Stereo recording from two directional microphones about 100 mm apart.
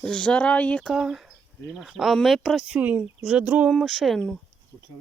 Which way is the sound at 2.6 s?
15° right (ahead or behind).